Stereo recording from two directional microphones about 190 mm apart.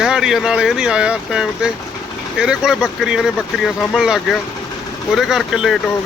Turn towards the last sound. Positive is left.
turn(degrees=0)  # may be behind; listen again after turning